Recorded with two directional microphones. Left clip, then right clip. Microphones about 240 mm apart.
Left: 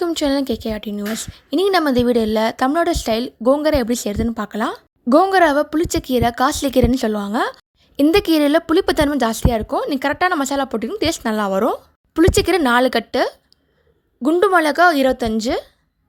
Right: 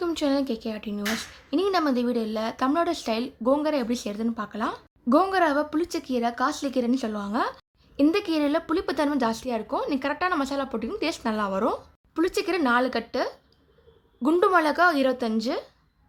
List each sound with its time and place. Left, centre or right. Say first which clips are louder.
0.0 s a woman's voice: left 6 dB; left